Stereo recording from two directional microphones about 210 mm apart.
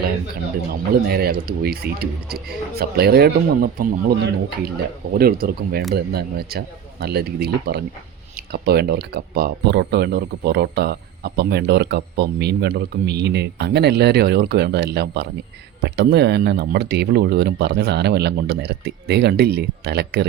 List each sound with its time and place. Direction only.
1.0 s speech: 45° right (ahead or behind)